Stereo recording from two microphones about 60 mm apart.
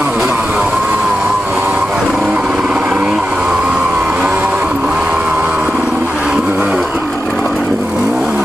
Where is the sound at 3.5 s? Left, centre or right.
Right.